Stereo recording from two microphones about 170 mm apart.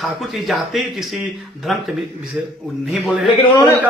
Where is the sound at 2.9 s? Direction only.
5° right (ahead or behind).